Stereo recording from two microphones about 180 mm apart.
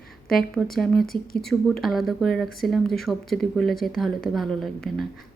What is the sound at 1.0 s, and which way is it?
Speech, 55° left (ahead or behind).